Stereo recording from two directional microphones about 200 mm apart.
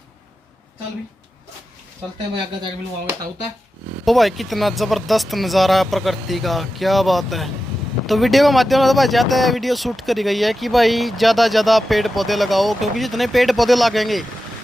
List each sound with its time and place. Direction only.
4.0 s speech: centre (ahead or behind)